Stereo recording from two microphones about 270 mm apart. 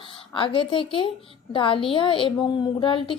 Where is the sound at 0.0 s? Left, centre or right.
Centre.